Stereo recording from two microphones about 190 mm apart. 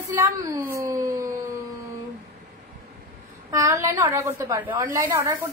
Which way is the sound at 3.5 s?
15° right (ahead or behind).